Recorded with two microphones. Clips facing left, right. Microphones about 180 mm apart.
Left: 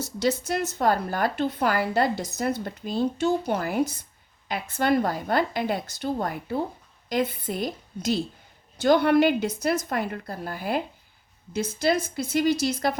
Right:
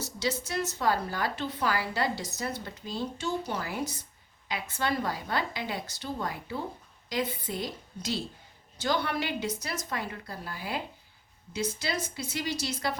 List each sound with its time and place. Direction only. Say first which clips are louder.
0.0 s speech: left 7 dB; 55° left (ahead or behind)